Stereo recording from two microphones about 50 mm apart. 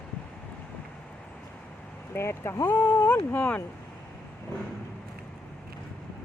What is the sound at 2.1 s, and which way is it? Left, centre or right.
Speech, left.